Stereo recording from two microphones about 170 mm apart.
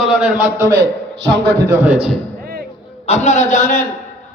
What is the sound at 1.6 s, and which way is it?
Speech, 10° right (ahead or behind).